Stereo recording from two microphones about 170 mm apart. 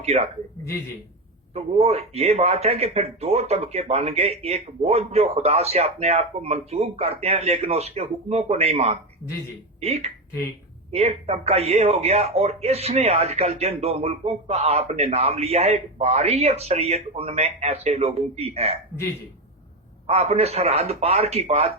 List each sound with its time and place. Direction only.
0.0 s speech: 40° right (ahead or behind)
1.5 s speech: 35° right (ahead or behind)
20.1 s speech: 35° right (ahead or behind)